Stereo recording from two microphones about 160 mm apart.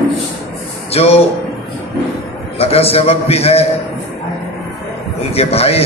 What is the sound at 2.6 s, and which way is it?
A man's voice, 40° left (ahead or behind).